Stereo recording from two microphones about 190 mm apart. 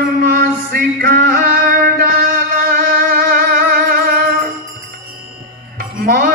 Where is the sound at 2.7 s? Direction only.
50° right (ahead or behind).